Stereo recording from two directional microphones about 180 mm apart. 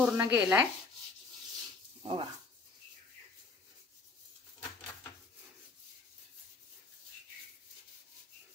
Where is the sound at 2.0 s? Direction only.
30° right (ahead or behind).